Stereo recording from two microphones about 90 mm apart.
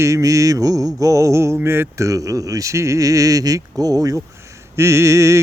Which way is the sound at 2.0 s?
40° right (ahead or behind).